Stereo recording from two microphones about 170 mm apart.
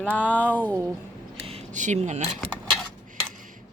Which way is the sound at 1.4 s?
35° right (ahead or behind).